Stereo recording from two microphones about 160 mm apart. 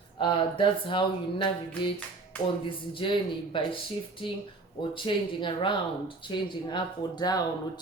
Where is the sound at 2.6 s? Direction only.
30° left (ahead or behind).